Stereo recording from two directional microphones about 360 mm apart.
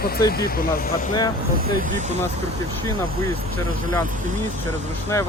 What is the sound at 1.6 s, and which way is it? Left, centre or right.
Speech, right.